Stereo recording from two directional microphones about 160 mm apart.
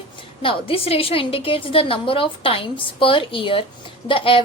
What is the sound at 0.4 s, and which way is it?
A woman's voice, 35° left (ahead or behind).